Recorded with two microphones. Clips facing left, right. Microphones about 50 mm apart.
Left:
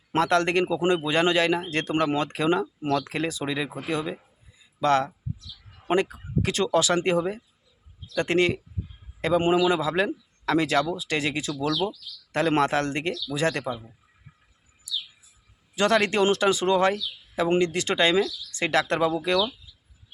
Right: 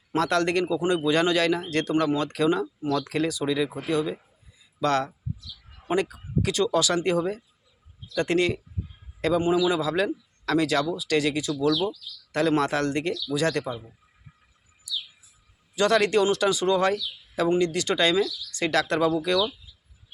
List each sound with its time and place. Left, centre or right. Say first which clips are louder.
0.2 s speech: left 1 dB; left
15.7 s speech: right 1 dB; left